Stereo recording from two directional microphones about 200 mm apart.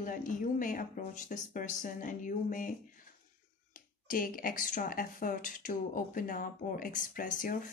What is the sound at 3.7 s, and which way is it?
Speech, 45° left (ahead or behind).